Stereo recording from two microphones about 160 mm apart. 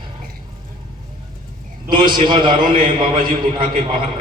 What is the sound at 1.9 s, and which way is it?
Speech, 30° right (ahead or behind).